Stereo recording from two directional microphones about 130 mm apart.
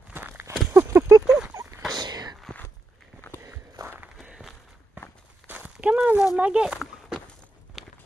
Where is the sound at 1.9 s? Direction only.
30° right (ahead or behind).